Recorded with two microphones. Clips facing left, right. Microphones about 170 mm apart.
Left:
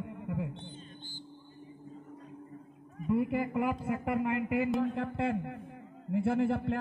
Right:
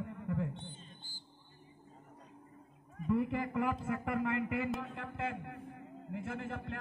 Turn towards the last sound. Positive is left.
turn(degrees=30)  # may be behind; listen again after turning